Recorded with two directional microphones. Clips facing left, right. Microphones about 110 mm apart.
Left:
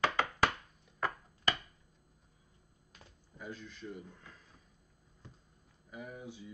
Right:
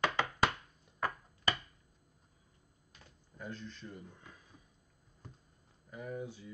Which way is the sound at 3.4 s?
10° left (ahead or behind).